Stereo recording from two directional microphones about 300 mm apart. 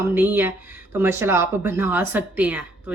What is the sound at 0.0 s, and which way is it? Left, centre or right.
Speech, centre.